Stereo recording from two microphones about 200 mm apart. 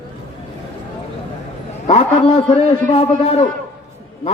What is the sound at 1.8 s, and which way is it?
A man's voice, 30° left (ahead or behind).